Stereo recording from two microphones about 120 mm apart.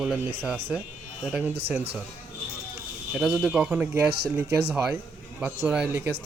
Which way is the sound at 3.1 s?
5° right (ahead or behind).